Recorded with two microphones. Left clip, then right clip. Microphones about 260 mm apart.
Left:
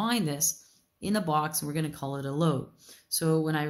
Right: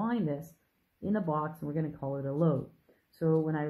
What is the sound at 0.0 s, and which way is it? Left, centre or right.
Speech, left.